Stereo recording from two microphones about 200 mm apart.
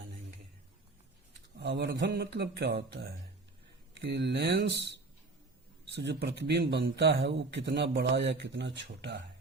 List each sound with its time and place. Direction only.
1.5 s a man's voice: 60° right (ahead or behind)
4.0 s a man's voice: 60° right (ahead or behind)